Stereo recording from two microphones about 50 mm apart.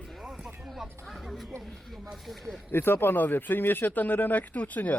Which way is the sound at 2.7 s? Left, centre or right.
Left.